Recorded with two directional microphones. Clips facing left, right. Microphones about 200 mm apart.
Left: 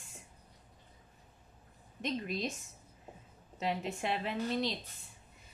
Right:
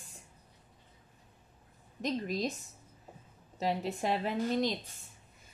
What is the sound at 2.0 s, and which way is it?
Speech, 40° right (ahead or behind).